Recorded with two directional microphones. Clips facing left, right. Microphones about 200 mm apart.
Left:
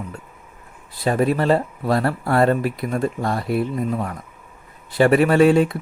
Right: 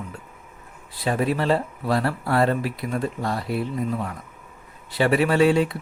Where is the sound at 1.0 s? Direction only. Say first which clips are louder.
Left 4 dB; 45° left (ahead or behind).